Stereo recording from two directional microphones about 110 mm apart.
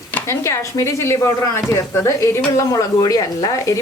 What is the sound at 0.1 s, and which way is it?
Speech, 25° left (ahead or behind).